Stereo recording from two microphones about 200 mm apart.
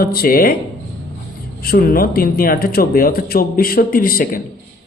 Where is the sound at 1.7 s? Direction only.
50° left (ahead or behind).